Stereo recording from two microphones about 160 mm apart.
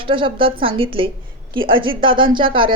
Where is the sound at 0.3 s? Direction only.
35° right (ahead or behind).